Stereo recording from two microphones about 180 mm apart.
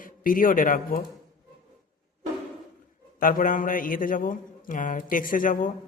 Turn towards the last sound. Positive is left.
turn(degrees=50)  # may be behind; listen again after turning